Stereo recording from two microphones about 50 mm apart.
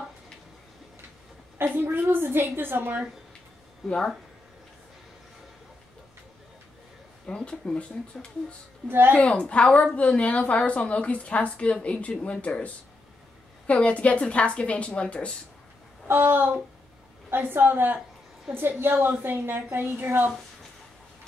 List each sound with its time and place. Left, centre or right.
1.6 s a woman's voice: right
3.8 s speech: centre
7.2 s speech: centre
8.8 s a woman's voice: right
9.1 s speech: left
16.1 s a woman's voice: right
18.9 s a woman's voice: right